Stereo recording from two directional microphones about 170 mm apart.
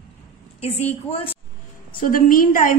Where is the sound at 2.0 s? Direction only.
55° left (ahead or behind).